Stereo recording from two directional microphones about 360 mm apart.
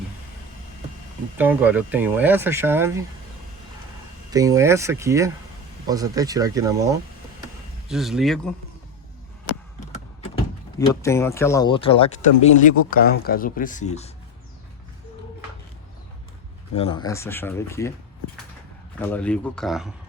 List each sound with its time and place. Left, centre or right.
1.4 s speech: centre
4.3 s speech: centre
9.8 s power windows: centre
10.8 s speech: centre
16.7 s speech: centre
18.9 s speech: centre